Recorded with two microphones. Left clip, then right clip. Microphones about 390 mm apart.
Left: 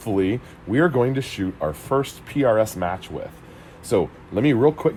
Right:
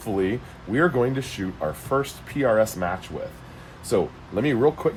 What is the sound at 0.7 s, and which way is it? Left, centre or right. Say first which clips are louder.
Speech: left 2 dB; centre.